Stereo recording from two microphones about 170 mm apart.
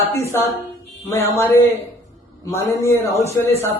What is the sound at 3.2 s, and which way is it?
Speech, 40° left (ahead or behind).